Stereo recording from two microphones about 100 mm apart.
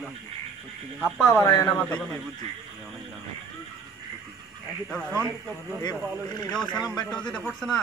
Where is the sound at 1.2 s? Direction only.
25° left (ahead or behind).